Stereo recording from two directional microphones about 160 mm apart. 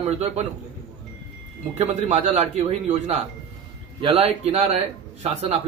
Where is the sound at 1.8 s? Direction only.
45° right (ahead or behind).